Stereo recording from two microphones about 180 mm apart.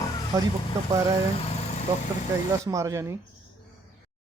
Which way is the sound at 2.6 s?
15° right (ahead or behind).